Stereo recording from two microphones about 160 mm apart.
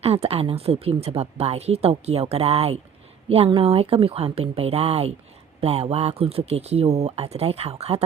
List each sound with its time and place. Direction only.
0.0 s speech: 40° right (ahead or behind)